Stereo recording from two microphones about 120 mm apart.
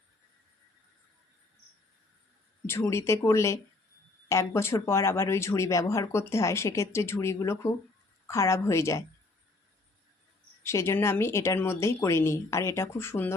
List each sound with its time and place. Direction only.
2.6 s speech: 20° left (ahead or behind)
10.6 s speech: 25° left (ahead or behind)